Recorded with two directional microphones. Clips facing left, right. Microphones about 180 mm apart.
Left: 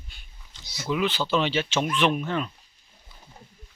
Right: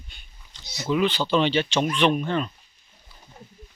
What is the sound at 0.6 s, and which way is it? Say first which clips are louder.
Speech: right 3 dB; 20° right (ahead or behind).